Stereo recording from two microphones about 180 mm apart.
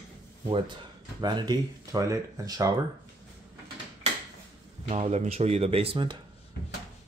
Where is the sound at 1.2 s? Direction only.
25° right (ahead or behind).